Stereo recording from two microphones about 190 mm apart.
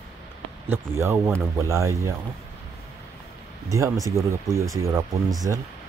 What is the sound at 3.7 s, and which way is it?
Speech, 15° right (ahead or behind).